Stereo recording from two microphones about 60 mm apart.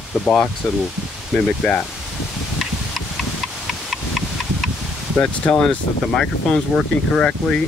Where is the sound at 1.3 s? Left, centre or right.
Centre.